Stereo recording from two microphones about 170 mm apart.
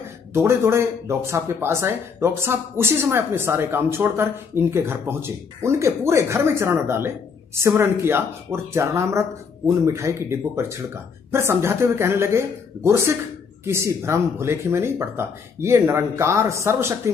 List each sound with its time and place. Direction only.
0.3 s speech: 15° right (ahead or behind)